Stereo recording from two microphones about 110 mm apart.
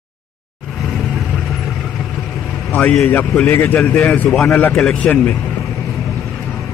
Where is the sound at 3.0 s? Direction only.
25° left (ahead or behind).